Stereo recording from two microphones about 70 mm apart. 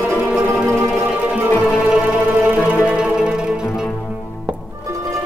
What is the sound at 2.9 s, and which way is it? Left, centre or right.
Music, centre.